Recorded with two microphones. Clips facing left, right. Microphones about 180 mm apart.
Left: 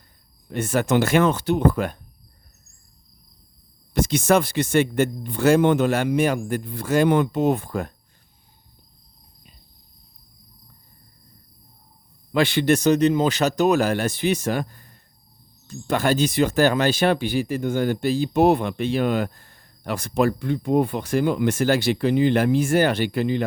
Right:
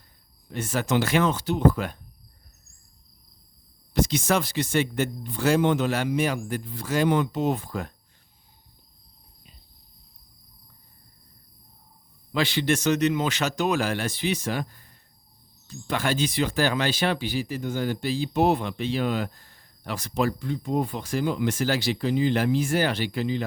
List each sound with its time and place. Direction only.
0.5 s speech: 55° left (ahead or behind)
3.9 s speech: 50° left (ahead or behind)
12.3 s speech: 55° left (ahead or behind)
12.7 s speech: 35° left (ahead or behind); by 23.5 s 60° left (ahead or behind)